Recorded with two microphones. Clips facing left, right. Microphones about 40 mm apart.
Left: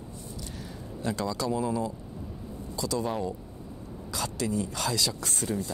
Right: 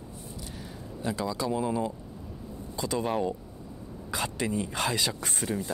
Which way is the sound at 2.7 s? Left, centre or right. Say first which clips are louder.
Right 1 dB; right.